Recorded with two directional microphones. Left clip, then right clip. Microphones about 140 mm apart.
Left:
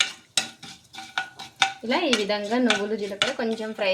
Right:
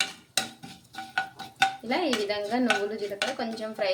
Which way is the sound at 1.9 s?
45° left (ahead or behind).